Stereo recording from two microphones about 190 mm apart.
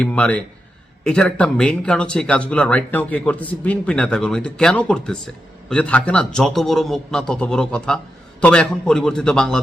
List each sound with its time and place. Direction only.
0.0 s a man's voice: 5° left (ahead or behind)